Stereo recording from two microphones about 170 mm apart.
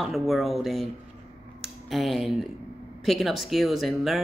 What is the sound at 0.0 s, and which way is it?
Speech, centre (ahead or behind).